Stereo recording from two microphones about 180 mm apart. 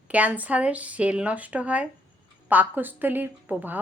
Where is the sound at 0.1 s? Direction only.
10° right (ahead or behind).